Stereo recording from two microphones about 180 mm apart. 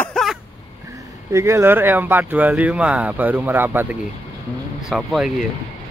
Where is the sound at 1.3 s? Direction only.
15° right (ahead or behind).